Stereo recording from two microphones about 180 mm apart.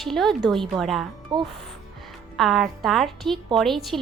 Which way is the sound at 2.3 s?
Centre (ahead or behind).